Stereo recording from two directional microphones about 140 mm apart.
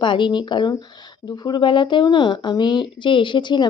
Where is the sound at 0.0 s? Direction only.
35° left (ahead or behind).